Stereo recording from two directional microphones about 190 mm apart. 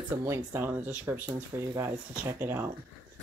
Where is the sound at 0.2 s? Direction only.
10° right (ahead or behind).